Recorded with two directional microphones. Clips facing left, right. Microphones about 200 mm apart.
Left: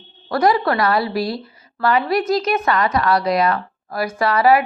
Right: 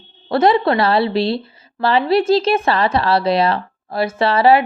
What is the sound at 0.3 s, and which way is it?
A woman's voice, 25° right (ahead or behind).